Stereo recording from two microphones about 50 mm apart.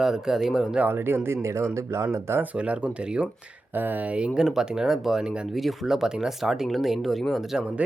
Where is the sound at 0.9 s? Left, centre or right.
Right.